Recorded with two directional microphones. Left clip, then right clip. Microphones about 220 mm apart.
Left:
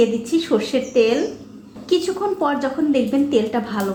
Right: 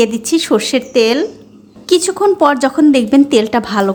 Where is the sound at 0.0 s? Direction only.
40° right (ahead or behind).